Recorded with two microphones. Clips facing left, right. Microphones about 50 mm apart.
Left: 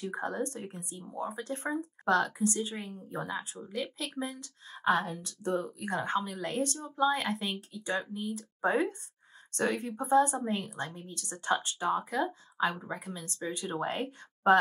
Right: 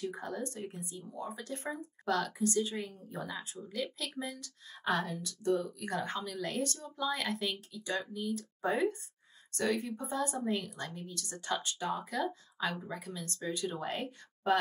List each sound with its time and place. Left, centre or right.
0.0 s speech: left